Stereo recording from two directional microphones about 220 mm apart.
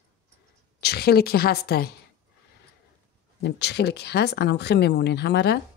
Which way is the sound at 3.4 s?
50° left (ahead or behind).